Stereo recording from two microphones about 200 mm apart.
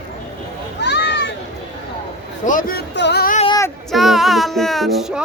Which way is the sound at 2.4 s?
40° left (ahead or behind).